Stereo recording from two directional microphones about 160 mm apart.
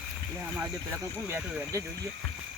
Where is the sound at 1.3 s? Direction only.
15° right (ahead or behind).